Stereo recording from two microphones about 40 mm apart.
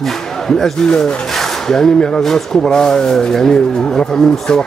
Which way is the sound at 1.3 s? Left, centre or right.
Centre.